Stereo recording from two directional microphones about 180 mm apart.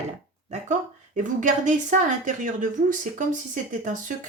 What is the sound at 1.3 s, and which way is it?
A woman's voice, 45° right (ahead or behind).